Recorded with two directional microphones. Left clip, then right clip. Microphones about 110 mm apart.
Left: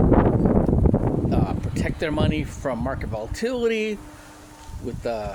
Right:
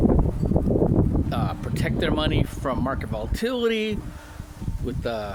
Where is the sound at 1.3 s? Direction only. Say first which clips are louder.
Left 3 dB; 20° right (ahead or behind).